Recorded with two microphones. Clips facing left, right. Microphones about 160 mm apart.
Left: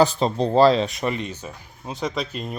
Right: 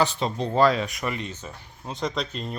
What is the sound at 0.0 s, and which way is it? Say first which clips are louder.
Speech: left 6 dB; 35° left (ahead or behind).